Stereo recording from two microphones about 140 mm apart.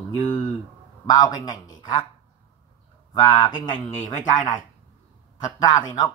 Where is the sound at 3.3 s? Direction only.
35° left (ahead or behind).